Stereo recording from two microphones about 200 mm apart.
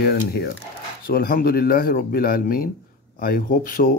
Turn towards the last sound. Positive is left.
turn(degrees=45)  # may be behind; listen again after turning